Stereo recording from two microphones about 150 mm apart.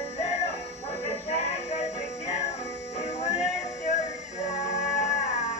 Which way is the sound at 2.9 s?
50° left (ahead or behind).